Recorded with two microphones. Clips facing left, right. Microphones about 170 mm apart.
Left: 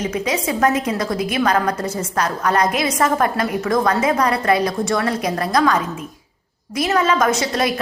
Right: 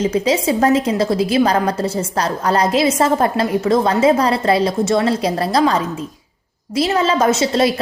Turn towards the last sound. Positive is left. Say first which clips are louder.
# right 4 dB
turn(degrees=-25)  # may be behind; listen again after turning